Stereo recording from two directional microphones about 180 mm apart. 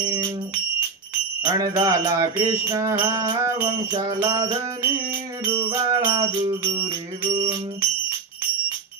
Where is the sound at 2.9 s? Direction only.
15° right (ahead or behind).